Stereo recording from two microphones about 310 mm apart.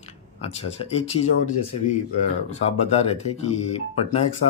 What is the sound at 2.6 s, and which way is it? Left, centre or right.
Speech, centre.